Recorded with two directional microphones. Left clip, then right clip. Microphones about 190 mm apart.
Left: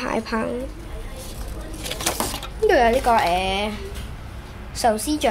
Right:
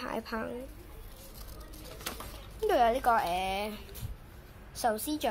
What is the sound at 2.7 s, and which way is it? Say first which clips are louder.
Speech: left 9 dB; 30° right (ahead or behind).